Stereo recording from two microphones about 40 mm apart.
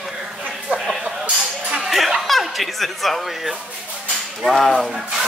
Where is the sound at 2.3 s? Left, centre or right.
Centre.